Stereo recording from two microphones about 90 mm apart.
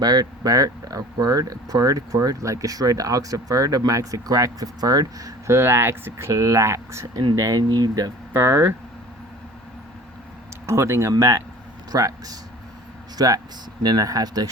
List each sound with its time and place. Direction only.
0.0 s speech: 45° right (ahead or behind)
5.5 s speech: 25° right (ahead or behind)
7.3 s speech: 40° right (ahead or behind)
8.3 s speech: 30° right (ahead or behind)
10.7 s speech: 30° right (ahead or behind)